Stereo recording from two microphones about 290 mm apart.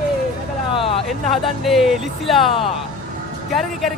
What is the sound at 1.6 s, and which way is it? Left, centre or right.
Speech, centre.